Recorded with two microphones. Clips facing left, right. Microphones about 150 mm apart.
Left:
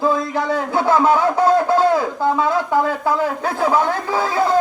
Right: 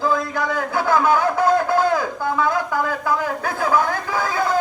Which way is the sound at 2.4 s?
25° left (ahead or behind).